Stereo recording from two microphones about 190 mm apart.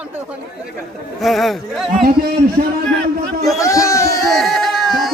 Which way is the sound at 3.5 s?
15° left (ahead or behind).